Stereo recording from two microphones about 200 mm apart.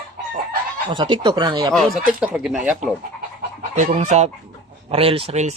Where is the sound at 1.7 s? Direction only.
5° right (ahead or behind).